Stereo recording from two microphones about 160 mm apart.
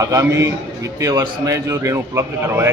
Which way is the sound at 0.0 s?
20° right (ahead or behind).